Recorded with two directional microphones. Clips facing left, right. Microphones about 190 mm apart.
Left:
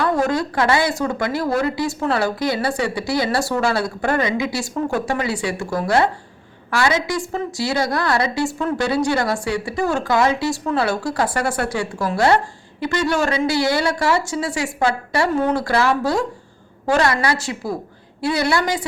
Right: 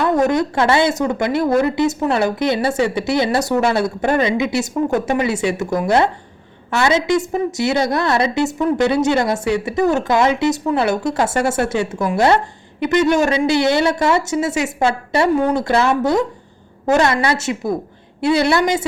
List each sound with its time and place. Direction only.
0.0 s a woman's voice: 20° right (ahead or behind)